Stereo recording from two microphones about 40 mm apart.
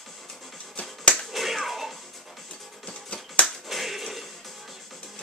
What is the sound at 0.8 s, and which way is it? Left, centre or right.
Finger snapping, left.